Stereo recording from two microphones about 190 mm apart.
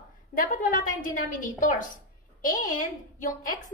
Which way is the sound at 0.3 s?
45° left (ahead or behind).